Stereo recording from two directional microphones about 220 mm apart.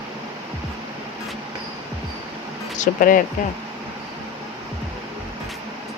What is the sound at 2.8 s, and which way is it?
Speech, 40° left (ahead or behind).